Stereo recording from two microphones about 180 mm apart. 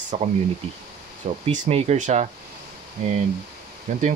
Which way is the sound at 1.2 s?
35° right (ahead or behind).